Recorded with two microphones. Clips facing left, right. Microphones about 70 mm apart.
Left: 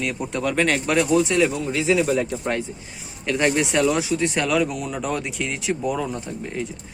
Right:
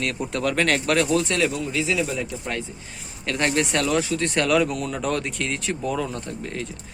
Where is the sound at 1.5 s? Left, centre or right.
Left.